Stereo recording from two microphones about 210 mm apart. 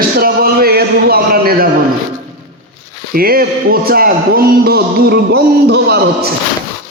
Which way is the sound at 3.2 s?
45° right (ahead or behind).